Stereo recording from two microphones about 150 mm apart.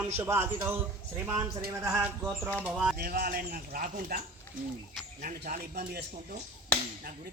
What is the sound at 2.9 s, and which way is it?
A man's voice, 85° right.